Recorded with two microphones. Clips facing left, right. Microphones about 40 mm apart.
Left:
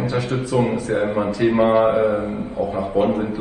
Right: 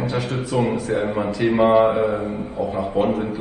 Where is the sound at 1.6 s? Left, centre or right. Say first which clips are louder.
Right 2 dB; left.